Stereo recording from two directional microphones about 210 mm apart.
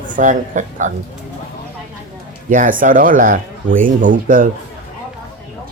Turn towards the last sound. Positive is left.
turn(degrees=-40)  # may be behind; listen again after turning